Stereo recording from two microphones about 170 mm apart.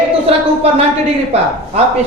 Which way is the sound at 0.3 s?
35° right (ahead or behind).